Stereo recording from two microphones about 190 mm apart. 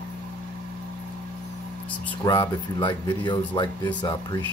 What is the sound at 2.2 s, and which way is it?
Speech, 20° left (ahead or behind).